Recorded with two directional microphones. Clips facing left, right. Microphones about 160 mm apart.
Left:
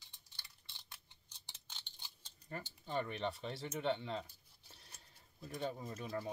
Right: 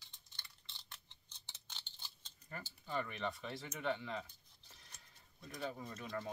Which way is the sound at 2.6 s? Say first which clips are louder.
Left 1 dB; 30° left (ahead or behind).